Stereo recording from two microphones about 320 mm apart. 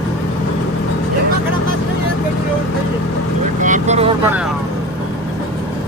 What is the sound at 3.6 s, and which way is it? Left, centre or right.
Vehicle, right.